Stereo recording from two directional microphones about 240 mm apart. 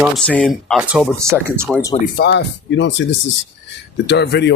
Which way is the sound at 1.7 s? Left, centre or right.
Centre.